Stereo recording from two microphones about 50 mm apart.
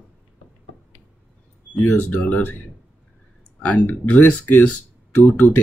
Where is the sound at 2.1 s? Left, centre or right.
Left.